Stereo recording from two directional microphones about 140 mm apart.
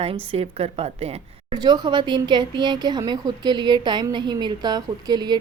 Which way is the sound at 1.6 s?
30° right (ahead or behind).